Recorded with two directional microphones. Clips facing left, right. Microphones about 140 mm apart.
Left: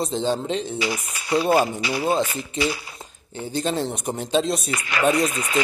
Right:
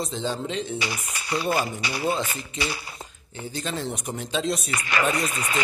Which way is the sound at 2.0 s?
30° left (ahead or behind).